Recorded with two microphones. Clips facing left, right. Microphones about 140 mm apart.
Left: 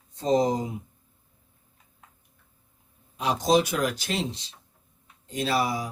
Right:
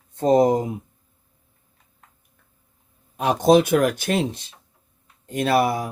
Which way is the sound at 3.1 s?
55° right (ahead or behind).